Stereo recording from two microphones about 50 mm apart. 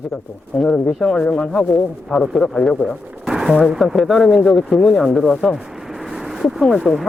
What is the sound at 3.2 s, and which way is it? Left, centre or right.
Speech, centre.